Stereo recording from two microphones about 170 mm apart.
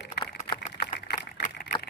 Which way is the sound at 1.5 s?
75° left (ahead or behind).